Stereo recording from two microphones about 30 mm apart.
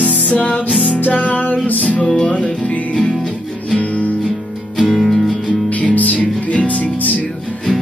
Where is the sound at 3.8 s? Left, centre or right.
Left.